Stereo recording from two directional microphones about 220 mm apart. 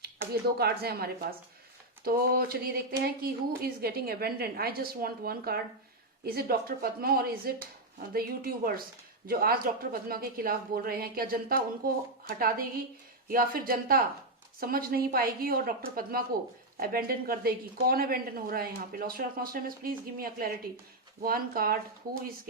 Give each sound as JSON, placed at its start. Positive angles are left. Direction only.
{"t": 0.6, "sound": "a woman's voice", "side_deg": -45}